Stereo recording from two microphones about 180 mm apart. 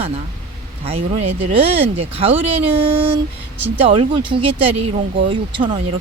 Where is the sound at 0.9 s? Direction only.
35° right (ahead or behind).